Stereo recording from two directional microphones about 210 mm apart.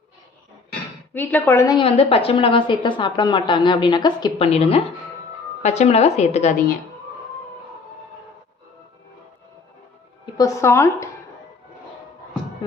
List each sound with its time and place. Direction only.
1.1 s a woman's voice: 10° left (ahead or behind); by 6.6 s 30° left (ahead or behind)
10.3 s speech: 15° left (ahead or behind)